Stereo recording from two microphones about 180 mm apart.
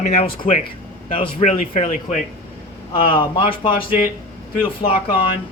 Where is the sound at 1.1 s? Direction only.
30° left (ahead or behind).